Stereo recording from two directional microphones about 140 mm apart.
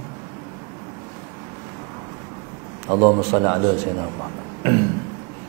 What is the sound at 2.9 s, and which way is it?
Speech, 25° right (ahead or behind).